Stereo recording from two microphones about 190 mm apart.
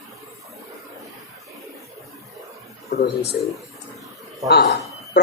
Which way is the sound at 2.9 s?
35° left (ahead or behind).